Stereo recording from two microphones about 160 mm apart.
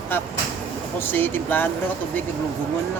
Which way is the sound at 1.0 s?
10° left (ahead or behind).